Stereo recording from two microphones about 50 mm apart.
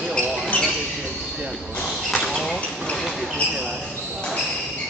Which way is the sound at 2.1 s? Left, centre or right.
Centre.